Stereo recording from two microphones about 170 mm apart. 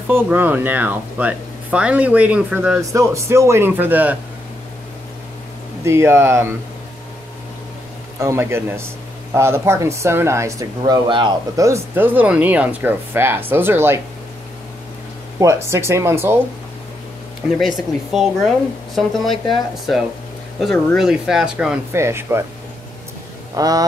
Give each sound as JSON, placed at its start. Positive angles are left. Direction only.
{"t": 0.1, "sound": "speech", "side_deg": -10}
{"t": 2.8, "sound": "speech", "side_deg": -20}
{"t": 5.9, "sound": "speech", "side_deg": -15}
{"t": 8.2, "sound": "speech", "side_deg": -15}
{"t": 10.8, "sound": "speech", "side_deg": -30}
{"t": 15.3, "sound": "speech", "side_deg": -15}
{"t": 17.6, "sound": "speech", "side_deg": 0}
{"t": 20.6, "sound": "speech", "side_deg": 0}
{"t": 21.9, "sound": "speech", "side_deg": -15}
{"t": 23.5, "sound": "a man's voice", "side_deg": -20}